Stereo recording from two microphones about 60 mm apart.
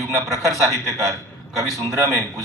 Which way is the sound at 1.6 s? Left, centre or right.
Right.